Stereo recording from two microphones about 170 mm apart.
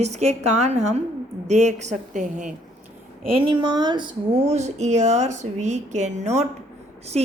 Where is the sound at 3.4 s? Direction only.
30° right (ahead or behind).